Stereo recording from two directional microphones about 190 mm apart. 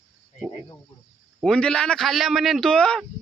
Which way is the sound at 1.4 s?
5° left (ahead or behind).